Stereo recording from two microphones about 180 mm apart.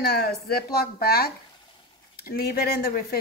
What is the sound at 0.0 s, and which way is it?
A woman's voice, 60° left (ahead or behind).